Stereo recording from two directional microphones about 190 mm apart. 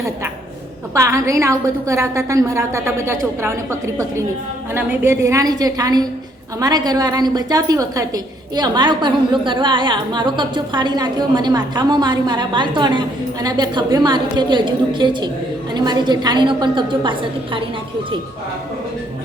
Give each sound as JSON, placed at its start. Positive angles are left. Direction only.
{"t": 0.9, "sound": "a woman's voice", "side_deg": -15}